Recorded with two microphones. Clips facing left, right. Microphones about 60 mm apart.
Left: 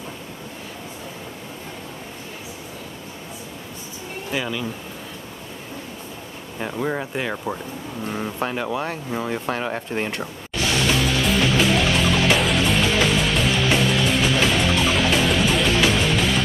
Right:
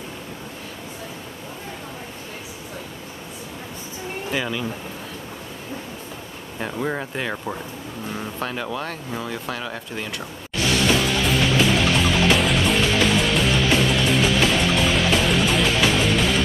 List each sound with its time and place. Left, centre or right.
4.3 s speech: centre
6.6 s speech: centre
8.4 s speech: centre; by 10.2 s left
11.1 s music: centre